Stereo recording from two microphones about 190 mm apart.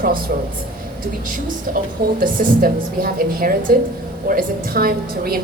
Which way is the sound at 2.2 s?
50° right (ahead or behind).